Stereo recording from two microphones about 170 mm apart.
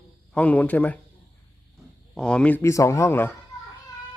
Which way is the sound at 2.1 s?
5° left (ahead or behind).